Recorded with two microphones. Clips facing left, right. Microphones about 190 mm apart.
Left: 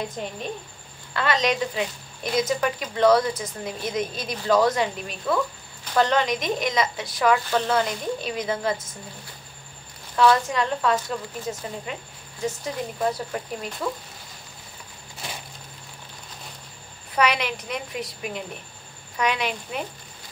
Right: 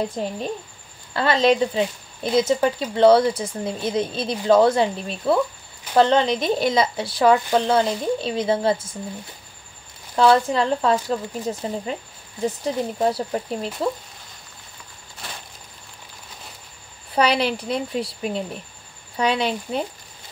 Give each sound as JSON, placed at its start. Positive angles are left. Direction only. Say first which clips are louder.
{"t": 0.1, "sound": "speech", "louder": "right 5 dB", "side_deg": -35}
{"t": 10.1, "sound": "speech", "louder": "right 3 dB", "side_deg": -30}
{"t": 17.1, "sound": "speech", "louder": "right 4 dB", "side_deg": -30}